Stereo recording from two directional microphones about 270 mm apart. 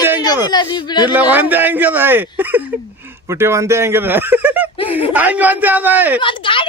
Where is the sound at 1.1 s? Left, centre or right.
Centre.